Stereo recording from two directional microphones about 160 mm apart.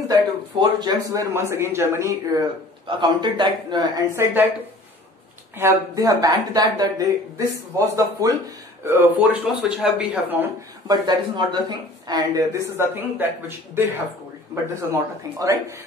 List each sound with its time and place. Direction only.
0.1 s a sound: 25° right (ahead or behind)
1.5 s a man's voice: 15° right (ahead or behind)
4.1 s speech: 15° right (ahead or behind)
5.6 s a man's voice: 20° right (ahead or behind)
10.9 s a man's voice: 25° right (ahead or behind)